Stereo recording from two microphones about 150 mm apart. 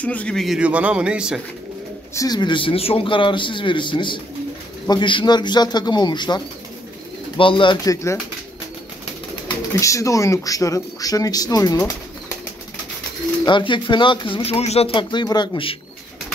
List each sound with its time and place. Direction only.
0.0 s speech: 10° left (ahead or behind)
2.1 s speech: 25° left (ahead or behind)
9.8 s speech: 20° left (ahead or behind)
13.5 s speech: 30° left (ahead or behind)